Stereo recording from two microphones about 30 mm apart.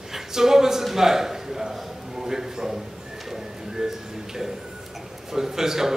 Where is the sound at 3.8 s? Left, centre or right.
Centre.